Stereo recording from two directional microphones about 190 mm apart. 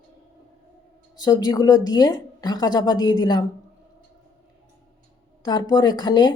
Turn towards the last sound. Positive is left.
turn(degrees=20)  # may be behind; listen again after turning